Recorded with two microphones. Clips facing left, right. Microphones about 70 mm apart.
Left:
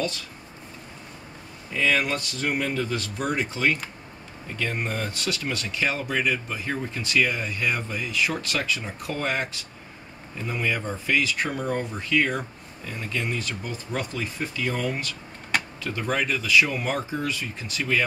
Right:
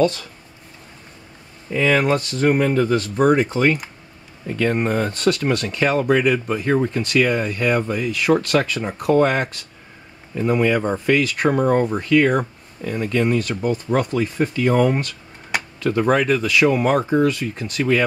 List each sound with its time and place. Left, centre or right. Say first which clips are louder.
1.7 s speech: right 7 dB; right